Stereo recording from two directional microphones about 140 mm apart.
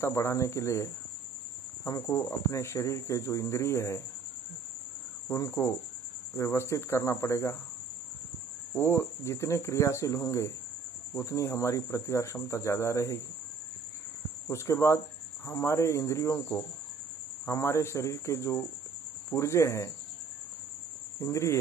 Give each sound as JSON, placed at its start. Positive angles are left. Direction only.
{"t": 0.0, "sound": "speech", "side_deg": 20}
{"t": 1.9, "sound": "speech", "side_deg": 25}
{"t": 5.3, "sound": "speech", "side_deg": 20}
{"t": 8.7, "sound": "speech", "side_deg": 15}
{"t": 14.5, "sound": "speech", "side_deg": 20}
{"t": 21.2, "sound": "speech", "side_deg": 20}